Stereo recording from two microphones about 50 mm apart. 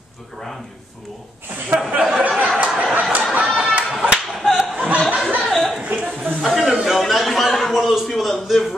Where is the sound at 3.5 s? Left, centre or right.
Right.